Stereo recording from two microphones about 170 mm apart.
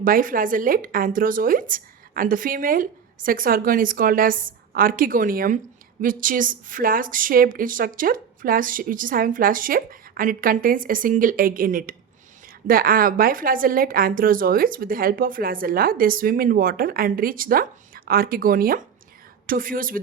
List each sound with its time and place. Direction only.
0.0 s a woman's voice: 55° right (ahead or behind)